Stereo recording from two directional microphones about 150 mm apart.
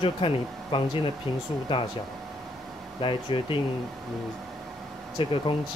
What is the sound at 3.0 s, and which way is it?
Speech, 35° left (ahead or behind).